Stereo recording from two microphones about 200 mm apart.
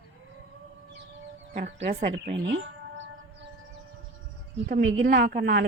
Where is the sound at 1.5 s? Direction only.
35° right (ahead or behind).